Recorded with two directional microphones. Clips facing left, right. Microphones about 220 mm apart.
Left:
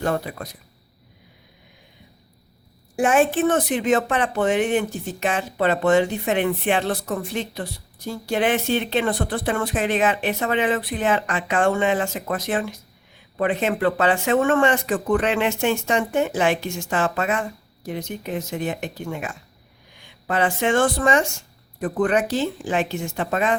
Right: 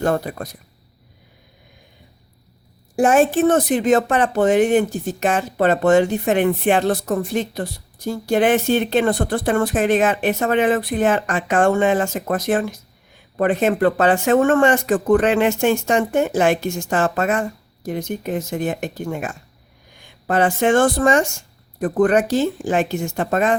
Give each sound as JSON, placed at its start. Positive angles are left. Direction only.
{"t": 0.0, "sound": "speech", "side_deg": -45}
{"t": 2.9, "sound": "speech", "side_deg": -40}